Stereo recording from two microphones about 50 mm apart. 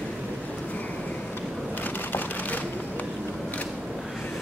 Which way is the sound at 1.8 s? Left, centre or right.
Left.